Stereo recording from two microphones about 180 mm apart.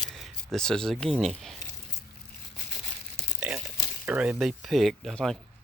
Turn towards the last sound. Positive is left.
turn(degrees=0)  # may be behind; listen again after turning